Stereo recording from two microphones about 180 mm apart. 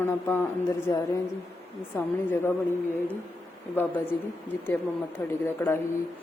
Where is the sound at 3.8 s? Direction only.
10° left (ahead or behind).